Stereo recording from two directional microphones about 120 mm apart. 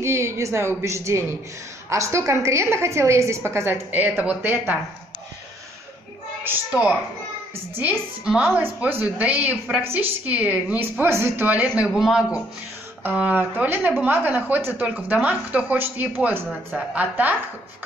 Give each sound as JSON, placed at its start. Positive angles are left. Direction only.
{"t": 0.0, "sound": "a woman's voice", "side_deg": -25}
{"t": 6.4, "sound": "speech", "side_deg": -15}